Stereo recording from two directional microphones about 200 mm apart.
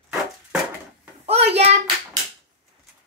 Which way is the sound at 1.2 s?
30° right (ahead or behind).